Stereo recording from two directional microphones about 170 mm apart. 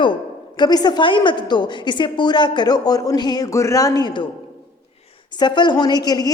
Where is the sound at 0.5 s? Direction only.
25° left (ahead or behind).